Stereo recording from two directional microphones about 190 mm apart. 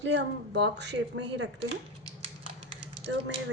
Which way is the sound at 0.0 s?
65° right (ahead or behind).